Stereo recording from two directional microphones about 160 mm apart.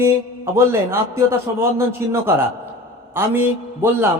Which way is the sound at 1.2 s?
15° right (ahead or behind).